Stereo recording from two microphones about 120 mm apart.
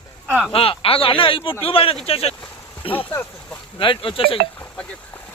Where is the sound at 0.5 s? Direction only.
50° left (ahead or behind).